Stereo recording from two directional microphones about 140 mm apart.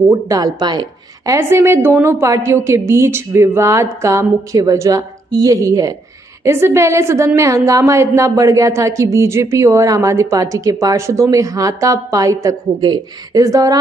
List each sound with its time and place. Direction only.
0.1 s a woman's voice: 25° right (ahead or behind)